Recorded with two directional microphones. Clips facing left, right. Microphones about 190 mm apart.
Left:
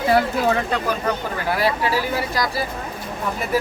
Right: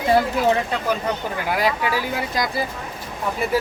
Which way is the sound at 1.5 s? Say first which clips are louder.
Left 1 dB; 15° right (ahead or behind).